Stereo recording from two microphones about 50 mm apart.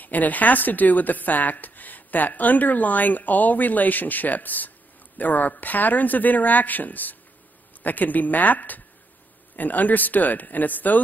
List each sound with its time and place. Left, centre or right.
0.0 s a woman's voice: left